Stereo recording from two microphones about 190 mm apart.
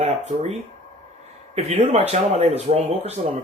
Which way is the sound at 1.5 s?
35° right (ahead or behind).